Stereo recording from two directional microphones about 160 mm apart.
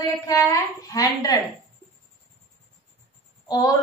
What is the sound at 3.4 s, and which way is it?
Speech, 25° left (ahead or behind).